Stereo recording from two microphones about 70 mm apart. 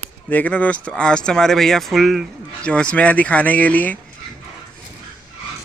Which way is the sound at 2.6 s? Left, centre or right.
Centre.